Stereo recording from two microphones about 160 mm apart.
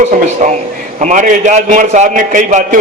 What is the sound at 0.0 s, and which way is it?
A man's voice, 50° right (ahead or behind).